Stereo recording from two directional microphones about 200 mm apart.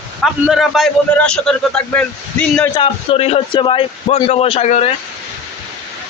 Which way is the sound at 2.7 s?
30° left (ahead or behind).